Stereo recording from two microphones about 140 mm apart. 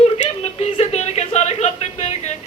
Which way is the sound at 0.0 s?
45° left (ahead or behind).